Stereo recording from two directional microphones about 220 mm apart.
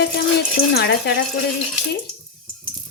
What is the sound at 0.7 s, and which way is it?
Speech, 50° left (ahead or behind).